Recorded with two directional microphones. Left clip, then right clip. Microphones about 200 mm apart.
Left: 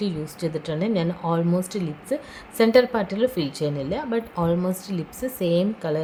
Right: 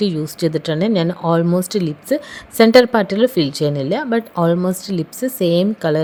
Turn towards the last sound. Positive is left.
turn(degrees=-35)  # may be behind; listen again after turning